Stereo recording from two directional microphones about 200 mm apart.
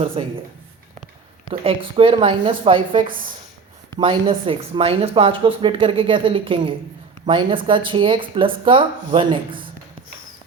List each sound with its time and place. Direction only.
0.2 s speech: 30° right (ahead or behind)
1.5 s speech: 25° right (ahead or behind)
3.0 s a woman's voice: 45° right (ahead or behind)
3.9 s speech: 25° right (ahead or behind)